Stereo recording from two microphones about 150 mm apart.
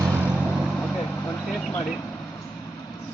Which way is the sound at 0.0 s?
10° right (ahead or behind).